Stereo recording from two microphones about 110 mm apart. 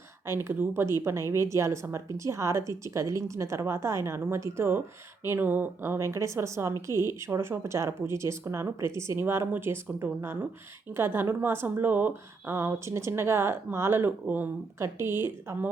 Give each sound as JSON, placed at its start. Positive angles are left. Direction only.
{"t": 0.3, "sound": "a woman's voice", "side_deg": -25}